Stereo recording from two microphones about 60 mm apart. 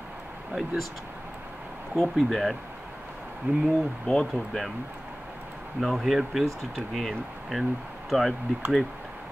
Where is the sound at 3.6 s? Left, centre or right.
Centre.